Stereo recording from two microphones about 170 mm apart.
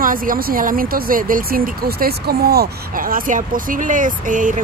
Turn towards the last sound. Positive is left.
turn(degrees=-50)  # may be behind; listen again after turning